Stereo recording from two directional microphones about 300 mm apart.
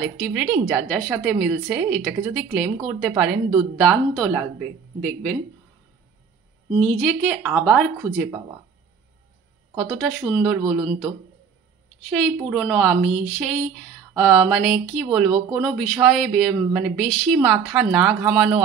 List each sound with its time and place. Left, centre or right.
0.0 s speech: centre
6.8 s speech: centre
9.8 s speech: centre
12.1 s speech: centre